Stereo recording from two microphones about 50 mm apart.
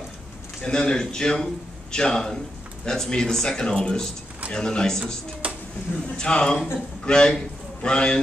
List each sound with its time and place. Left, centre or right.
0.6 s a man's voice: centre
5.4 s a sound: right
6.1 s a man's voice: centre